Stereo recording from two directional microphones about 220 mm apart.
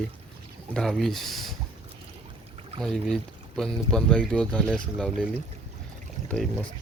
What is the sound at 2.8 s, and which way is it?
Speech, centre (ahead or behind).